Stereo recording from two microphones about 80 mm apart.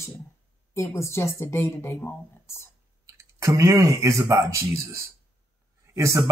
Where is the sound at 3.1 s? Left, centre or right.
Right.